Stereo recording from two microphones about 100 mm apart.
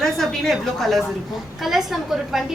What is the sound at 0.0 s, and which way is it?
A woman's voice, 5° left (ahead or behind).